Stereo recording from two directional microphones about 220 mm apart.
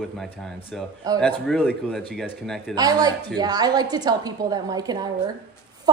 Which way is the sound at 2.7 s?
15° right (ahead or behind).